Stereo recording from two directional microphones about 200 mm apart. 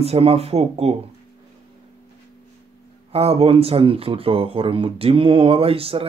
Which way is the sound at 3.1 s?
30° right (ahead or behind).